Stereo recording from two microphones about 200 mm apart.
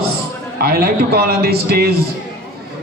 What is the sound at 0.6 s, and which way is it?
Speech, 50° right (ahead or behind).